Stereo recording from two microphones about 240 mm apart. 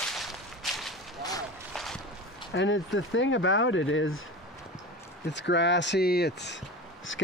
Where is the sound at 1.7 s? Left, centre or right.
Centre.